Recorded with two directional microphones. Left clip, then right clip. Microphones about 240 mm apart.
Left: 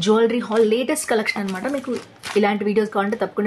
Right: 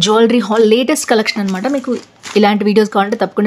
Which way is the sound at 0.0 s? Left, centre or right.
Right.